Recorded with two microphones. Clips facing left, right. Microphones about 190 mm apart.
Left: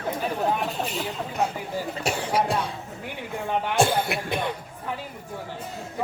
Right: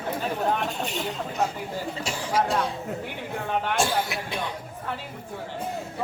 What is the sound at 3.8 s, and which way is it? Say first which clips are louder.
Speech: left 3 dB; 55° left (ahead or behind).